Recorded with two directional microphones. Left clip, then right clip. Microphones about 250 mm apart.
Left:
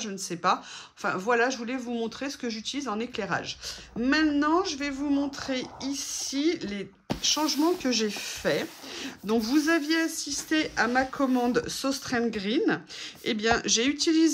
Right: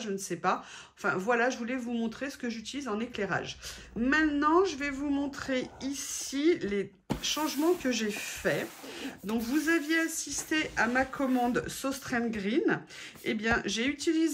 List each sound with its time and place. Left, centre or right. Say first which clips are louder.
0.0 s speech: left 3 dB; centre